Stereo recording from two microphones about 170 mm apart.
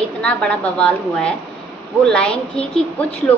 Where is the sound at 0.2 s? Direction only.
5° left (ahead or behind).